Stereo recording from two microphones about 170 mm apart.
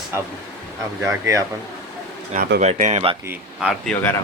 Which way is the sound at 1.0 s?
15° right (ahead or behind).